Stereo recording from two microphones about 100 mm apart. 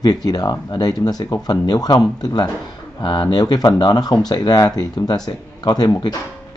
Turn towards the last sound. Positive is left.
turn(degrees=45)  # may be behind; listen again after turning